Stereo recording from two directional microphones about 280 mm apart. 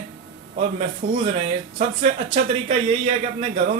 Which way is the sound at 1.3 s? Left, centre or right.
Right.